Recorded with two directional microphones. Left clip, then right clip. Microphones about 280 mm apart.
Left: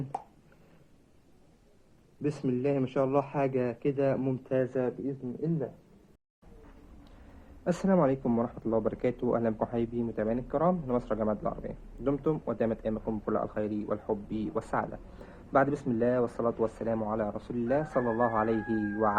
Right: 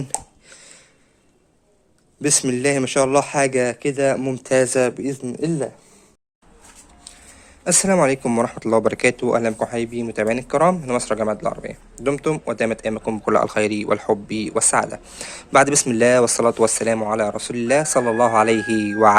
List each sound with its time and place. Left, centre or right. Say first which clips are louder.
2.2 s speech: right 11 dB; right
4.4 s speech: right 14 dB; right
7.6 s speech: right 10 dB; right
14.3 s speech: right 12 dB; right
15.2 s speech: right 11 dB; right